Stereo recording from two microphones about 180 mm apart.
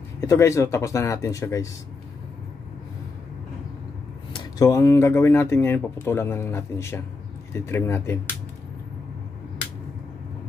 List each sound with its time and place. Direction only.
0.2 s speech: 15° left (ahead or behind)
4.3 s speech: 20° left (ahead or behind)